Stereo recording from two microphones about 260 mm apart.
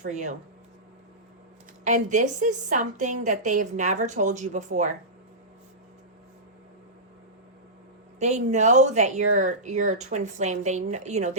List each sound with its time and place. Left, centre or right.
0.1 s a woman's voice: right
1.8 s a woman's voice: right
8.2 s a woman's voice: right